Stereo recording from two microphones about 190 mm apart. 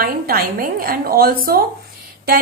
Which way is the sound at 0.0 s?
50° right (ahead or behind).